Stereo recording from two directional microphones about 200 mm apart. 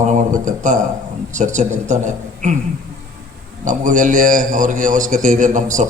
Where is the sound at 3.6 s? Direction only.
40° right (ahead or behind).